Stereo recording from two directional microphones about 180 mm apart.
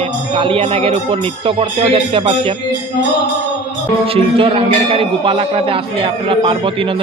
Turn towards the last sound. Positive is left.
turn(degrees=-30)  # may be behind; listen again after turning